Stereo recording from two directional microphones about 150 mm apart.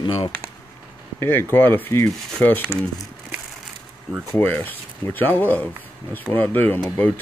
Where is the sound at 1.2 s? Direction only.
15° left (ahead or behind).